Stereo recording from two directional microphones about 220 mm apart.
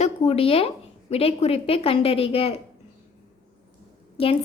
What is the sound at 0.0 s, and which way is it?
A woman's voice, 30° left (ahead or behind).